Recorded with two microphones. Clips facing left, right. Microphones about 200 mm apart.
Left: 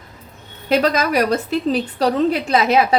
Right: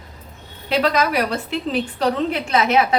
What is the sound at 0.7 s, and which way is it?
A woman's voice, 45° left (ahead or behind).